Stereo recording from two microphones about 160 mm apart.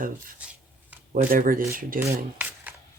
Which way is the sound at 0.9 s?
10° right (ahead or behind).